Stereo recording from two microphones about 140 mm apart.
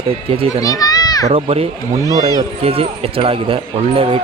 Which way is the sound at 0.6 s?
25° left (ahead or behind).